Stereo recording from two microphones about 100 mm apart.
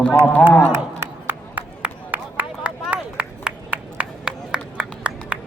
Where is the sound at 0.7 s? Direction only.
20° right (ahead or behind).